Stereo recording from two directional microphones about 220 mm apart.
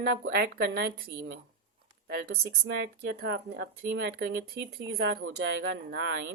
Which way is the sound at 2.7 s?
50° right (ahead or behind).